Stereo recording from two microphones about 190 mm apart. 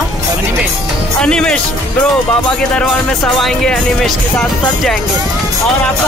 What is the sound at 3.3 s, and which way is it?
Speech, 5° left (ahead or behind).